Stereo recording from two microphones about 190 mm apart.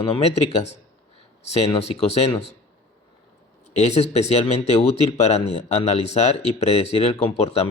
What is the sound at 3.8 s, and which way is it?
Speech, 35° left (ahead or behind).